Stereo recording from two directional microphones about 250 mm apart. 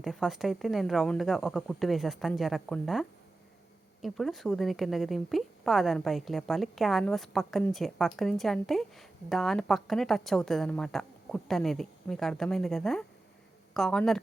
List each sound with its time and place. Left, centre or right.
0.0 s a woman's voice: centre